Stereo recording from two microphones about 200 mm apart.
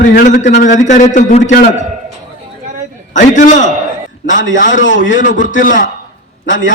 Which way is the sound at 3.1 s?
40° left (ahead or behind).